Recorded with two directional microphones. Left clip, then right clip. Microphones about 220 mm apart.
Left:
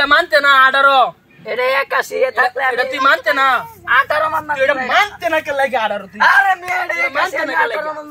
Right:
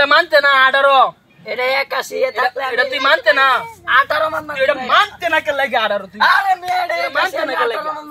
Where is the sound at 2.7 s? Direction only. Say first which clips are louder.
Even; 10° right (ahead or behind).